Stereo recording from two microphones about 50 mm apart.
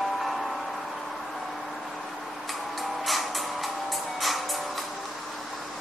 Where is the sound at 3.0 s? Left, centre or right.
Centre.